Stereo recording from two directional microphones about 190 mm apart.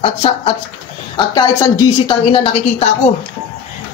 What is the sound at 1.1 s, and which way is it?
A woman's voice, 20° left (ahead or behind).